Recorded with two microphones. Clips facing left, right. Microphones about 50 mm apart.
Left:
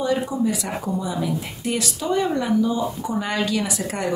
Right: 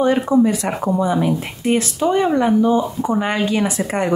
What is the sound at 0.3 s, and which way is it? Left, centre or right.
Speech, right.